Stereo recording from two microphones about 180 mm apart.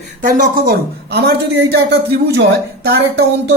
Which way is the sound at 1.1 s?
65° right (ahead or behind).